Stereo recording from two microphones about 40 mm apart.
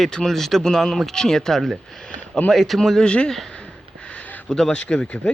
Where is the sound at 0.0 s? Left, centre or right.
Centre.